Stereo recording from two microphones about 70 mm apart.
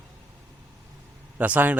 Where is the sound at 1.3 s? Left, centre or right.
Right.